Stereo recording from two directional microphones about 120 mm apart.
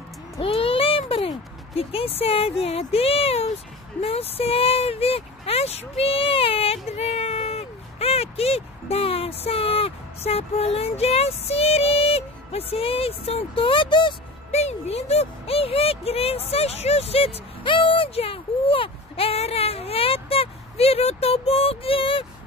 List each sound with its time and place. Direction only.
0.4 s a sound: 50° left (ahead or behind)
1.8 s speech: 50° left (ahead or behind)
14.5 s speech: 65° left (ahead or behind)